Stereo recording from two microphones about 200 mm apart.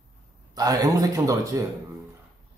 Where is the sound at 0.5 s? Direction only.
20° right (ahead or behind).